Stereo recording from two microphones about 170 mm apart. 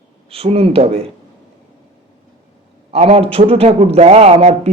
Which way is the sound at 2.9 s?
35° right (ahead or behind).